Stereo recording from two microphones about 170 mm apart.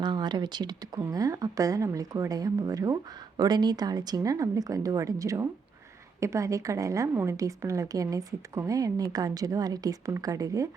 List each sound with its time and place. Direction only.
0.0 s speech: 25° right (ahead or behind)